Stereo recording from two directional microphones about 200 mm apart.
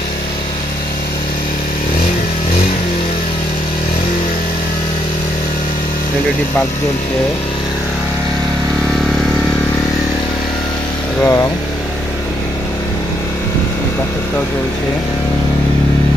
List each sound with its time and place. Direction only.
11.1 s speech: 15° left (ahead or behind)